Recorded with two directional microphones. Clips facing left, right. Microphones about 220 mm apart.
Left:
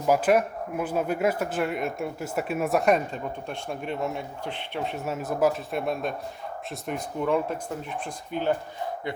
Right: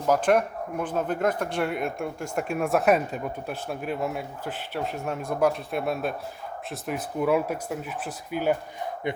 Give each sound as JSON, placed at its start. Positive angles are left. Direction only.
{"t": 0.1, "sound": "speech", "side_deg": 5}
{"t": 9.1, "sound": "speech", "side_deg": -20}